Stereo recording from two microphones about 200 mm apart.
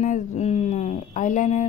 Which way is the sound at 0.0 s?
35° left (ahead or behind).